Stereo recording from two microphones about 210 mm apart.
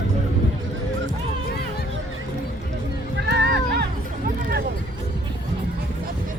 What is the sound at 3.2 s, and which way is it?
Music, 50° right (ahead or behind).